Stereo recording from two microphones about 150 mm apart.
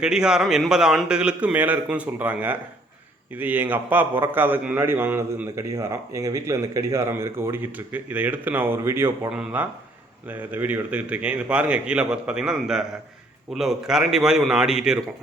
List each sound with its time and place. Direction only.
0.0 s a man's voice: 5° right (ahead or behind)